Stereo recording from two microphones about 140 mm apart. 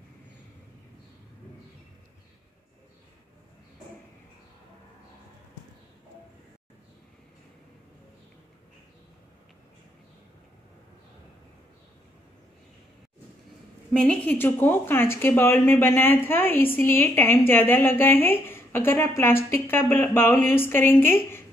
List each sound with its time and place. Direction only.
13.9 s a woman's voice: 10° left (ahead or behind)